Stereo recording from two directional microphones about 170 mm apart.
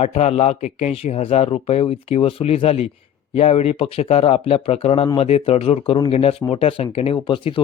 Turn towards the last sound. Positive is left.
turn(degrees=30)  # may be behind; listen again after turning